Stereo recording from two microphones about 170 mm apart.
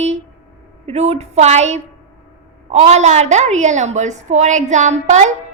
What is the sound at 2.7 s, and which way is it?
A woman's voice, 40° right (ahead or behind).